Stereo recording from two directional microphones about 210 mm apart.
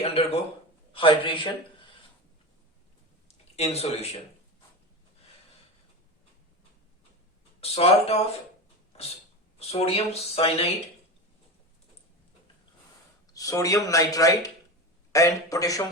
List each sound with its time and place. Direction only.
0.0 s speech: 30° left (ahead or behind)
3.2 s speech: 30° left (ahead or behind)
7.6 s speech: 30° left (ahead or behind)
9.6 s speech: 30° left (ahead or behind)
13.3 s speech: 15° left (ahead or behind)